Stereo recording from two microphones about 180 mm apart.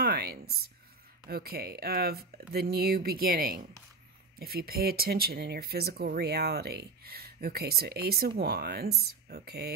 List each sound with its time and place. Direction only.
0.0 s speech: 60° right (ahead or behind)